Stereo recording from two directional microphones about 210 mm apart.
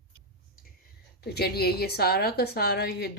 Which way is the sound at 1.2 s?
50° left (ahead or behind).